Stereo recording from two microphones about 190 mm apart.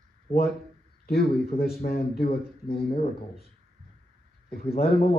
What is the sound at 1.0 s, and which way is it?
A man's voice, 55° left (ahead or behind).